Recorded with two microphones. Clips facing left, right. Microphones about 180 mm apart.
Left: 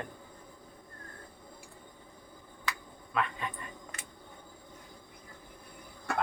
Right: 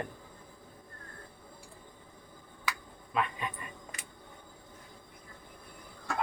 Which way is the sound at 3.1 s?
20° right (ahead or behind).